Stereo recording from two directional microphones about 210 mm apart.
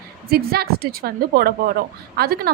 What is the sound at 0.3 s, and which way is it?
A woman's voice, 45° right (ahead or behind).